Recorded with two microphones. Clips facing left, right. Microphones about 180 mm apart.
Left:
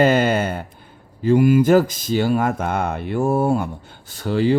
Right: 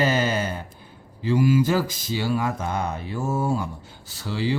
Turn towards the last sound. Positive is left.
turn(degrees=55)  # may be behind; listen again after turning